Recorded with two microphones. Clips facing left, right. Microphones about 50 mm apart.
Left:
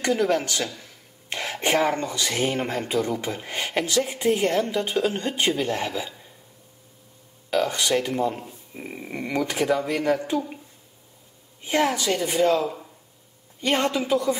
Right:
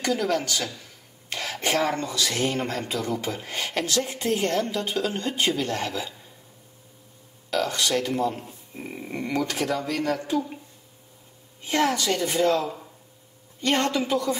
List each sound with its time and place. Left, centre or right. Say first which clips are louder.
0.0 s a woman's voice: left 3 dB; left
7.4 s a woman's voice: left 2 dB; centre
11.6 s a woman's voice: left 1 dB; centre